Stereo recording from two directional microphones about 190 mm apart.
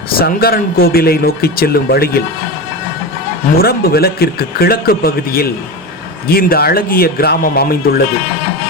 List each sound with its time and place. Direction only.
0.2 s speech: 50° left (ahead or behind)
3.6 s speech: 55° left (ahead or behind)